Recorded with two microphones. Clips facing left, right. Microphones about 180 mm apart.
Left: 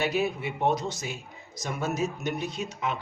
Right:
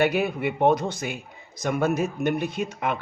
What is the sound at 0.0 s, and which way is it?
A man's voice, 55° right (ahead or behind).